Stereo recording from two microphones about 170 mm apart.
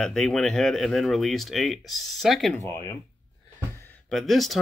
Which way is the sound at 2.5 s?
15° left (ahead or behind).